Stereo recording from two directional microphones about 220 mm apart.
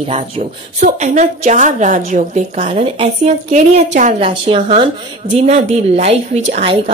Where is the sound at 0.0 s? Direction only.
30° right (ahead or behind).